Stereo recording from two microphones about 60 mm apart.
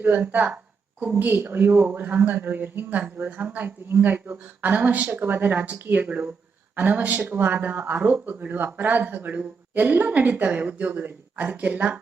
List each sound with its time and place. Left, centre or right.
0.0 s a woman's voice: right
1.3 s speech: right